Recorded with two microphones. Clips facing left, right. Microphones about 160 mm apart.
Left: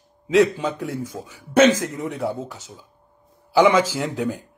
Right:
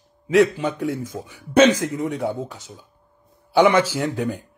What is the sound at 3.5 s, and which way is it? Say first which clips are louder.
Speech: even; 10° left (ahead or behind).